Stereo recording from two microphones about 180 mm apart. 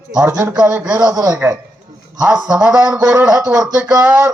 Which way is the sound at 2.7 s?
20° right (ahead or behind).